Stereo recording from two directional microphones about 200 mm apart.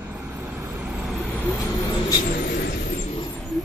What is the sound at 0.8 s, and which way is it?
Vehicle, 5° right (ahead or behind).